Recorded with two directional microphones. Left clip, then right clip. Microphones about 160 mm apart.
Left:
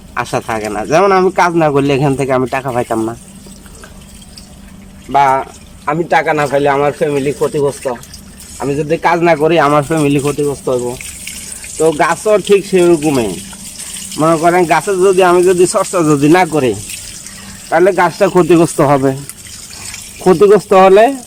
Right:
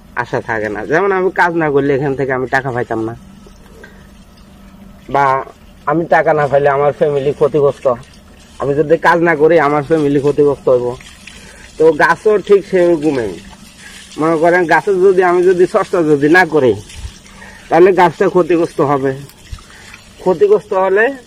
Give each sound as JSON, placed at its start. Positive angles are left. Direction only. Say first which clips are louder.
{"t": 0.1, "sound": "speech", "louder": "left 1 dB", "side_deg": 10}
{"t": 5.1, "sound": "speech", "louder": "left 2 dB", "side_deg": 5}
{"t": 12.3, "sound": "speech", "louder": "left 1 dB", "side_deg": 15}
{"t": 14.2, "sound": "speech", "louder": "left 1 dB", "side_deg": 20}
{"t": 18.3, "sound": "speech", "louder": "left 3 dB", "side_deg": 20}
{"t": 20.2, "sound": "speech", "louder": "left 3 dB", "side_deg": 25}